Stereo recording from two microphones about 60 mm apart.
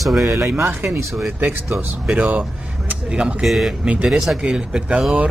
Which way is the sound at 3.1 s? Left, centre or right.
Centre.